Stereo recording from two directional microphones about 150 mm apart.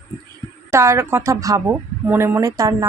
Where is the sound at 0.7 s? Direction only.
20° right (ahead or behind).